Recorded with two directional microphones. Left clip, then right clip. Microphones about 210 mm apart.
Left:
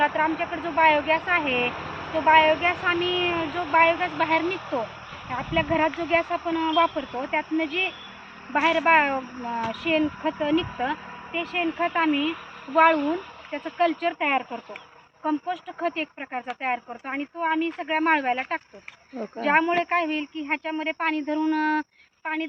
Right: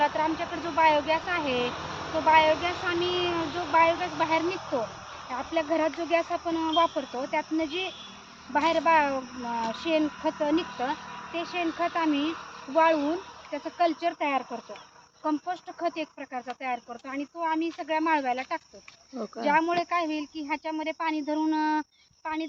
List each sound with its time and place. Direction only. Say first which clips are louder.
0.0 s speech: left 3 dB; centre (ahead or behind)
12.1 s speech: left 3 dB; 40° right (ahead or behind)
12.7 s speech: left 4 dB; 5° right (ahead or behind)